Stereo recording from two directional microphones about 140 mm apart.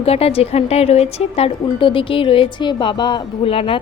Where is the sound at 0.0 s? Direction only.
45° left (ahead or behind).